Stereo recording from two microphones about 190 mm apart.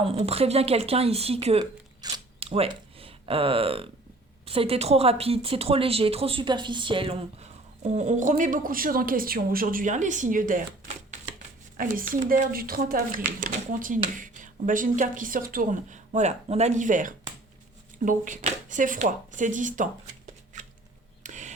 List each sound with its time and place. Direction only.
0.0 s speech: 30° right (ahead or behind)
2.0 s zipper: 20° right (ahead or behind)
4.4 s speech: 30° right (ahead or behind)
20.5 s shuffling cards: 40° right (ahead or behind)
21.2 s a sound: 40° right (ahead or behind)